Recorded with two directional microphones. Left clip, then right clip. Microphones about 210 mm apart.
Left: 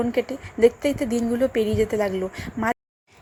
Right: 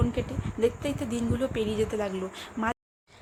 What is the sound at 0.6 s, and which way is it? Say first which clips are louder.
A woman's voice: left 9 dB; 15° left (ahead or behind).